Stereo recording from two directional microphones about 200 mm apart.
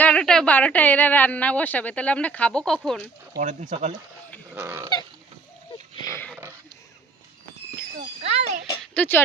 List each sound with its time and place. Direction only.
0.0 s a woman's voice: 5° left (ahead or behind)
3.3 s speech: 40° right (ahead or behind)
4.5 s dog: 15° right (ahead or behind)
8.2 s speech: 35° right (ahead or behind)
8.8 s speech: 10° left (ahead or behind)